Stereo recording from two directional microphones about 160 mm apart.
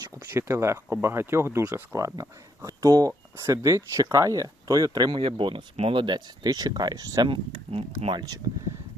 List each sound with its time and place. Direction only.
0.0 s speech: 20° right (ahead or behind)